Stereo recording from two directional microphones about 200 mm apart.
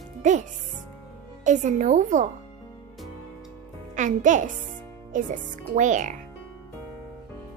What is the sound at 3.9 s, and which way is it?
A woman's voice, 40° right (ahead or behind).